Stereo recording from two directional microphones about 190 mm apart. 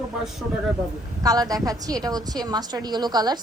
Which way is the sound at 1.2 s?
20° right (ahead or behind).